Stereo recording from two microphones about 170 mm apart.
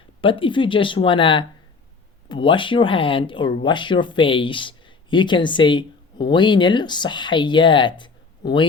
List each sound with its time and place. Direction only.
0.2 s speech: 30° left (ahead or behind)